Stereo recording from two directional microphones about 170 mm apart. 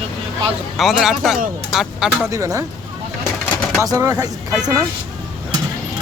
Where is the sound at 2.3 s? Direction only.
20° right (ahead or behind).